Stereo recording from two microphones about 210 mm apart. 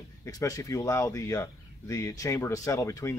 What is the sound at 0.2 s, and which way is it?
Speech, 15° left (ahead or behind).